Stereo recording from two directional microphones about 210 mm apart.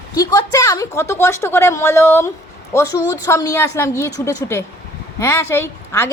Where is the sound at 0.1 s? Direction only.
15° left (ahead or behind).